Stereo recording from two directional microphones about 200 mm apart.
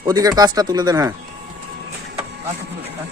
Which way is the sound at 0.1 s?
20° right (ahead or behind).